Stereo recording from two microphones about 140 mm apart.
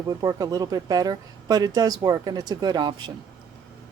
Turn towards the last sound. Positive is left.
turn(degrees=-30)  # may be behind; listen again after turning